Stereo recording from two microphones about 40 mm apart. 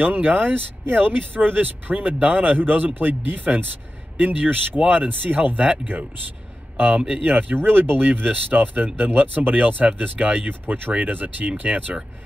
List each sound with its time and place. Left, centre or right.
0.0 s speech: right
7.2 s speech: right
7.5 s speech: right